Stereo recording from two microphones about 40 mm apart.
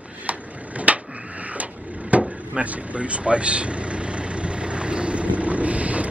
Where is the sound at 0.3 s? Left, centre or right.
Right.